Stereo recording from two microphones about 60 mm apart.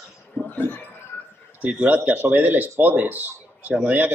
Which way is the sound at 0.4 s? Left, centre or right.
Left.